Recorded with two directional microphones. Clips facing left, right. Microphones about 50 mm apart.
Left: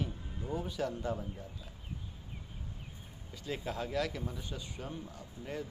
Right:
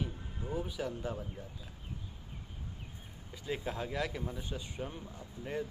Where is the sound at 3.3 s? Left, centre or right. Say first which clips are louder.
Right 1 dB; centre.